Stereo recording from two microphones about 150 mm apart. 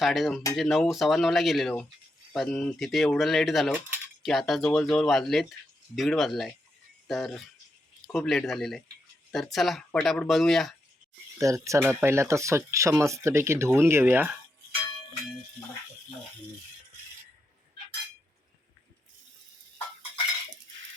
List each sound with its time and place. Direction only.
0.0 s speech: centre (ahead or behind)
11.3 s speech: 20° right (ahead or behind)